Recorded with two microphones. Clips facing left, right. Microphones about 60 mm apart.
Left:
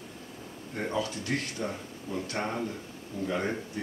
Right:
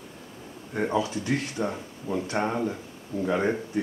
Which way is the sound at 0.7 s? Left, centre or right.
Centre.